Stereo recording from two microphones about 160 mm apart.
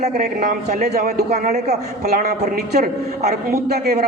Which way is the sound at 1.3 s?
45° right (ahead or behind).